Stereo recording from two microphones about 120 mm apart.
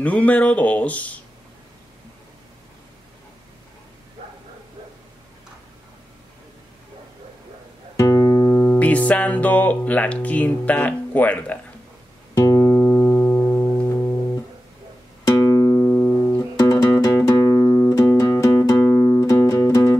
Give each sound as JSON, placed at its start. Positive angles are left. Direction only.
{"t": 0.0, "sound": "speech", "side_deg": 10}
{"t": 8.0, "sound": "music", "side_deg": 25}
{"t": 8.7, "sound": "speech", "side_deg": 10}
{"t": 12.4, "sound": "music", "side_deg": 25}
{"t": 12.7, "sound": "music", "side_deg": 15}
{"t": 15.2, "sound": "music", "side_deg": 25}
{"t": 16.5, "sound": "music", "side_deg": 30}
{"t": 18.9, "sound": "music", "side_deg": 15}